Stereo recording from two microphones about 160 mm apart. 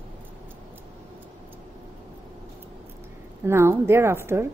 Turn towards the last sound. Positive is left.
turn(degrees=-15)  # may be behind; listen again after turning